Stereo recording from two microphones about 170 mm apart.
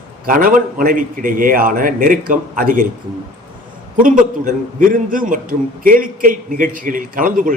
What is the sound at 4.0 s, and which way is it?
A man's voice, 50° right (ahead or behind).